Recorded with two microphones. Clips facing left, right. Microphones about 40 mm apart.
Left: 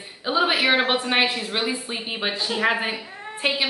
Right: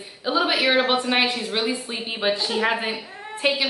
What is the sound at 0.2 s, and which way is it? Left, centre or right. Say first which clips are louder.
A woman's voice: even; centre.